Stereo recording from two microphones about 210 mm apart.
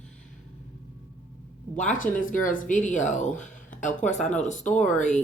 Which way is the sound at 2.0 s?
40° left (ahead or behind).